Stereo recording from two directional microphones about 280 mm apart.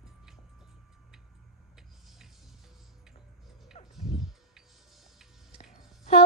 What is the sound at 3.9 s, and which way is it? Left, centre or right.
Music, centre.